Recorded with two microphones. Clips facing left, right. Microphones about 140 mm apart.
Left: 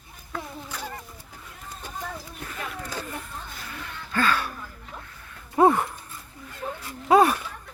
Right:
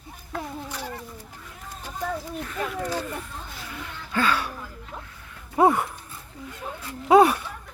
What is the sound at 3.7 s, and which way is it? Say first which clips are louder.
Gasp: right 1 dB; 15° right (ahead or behind).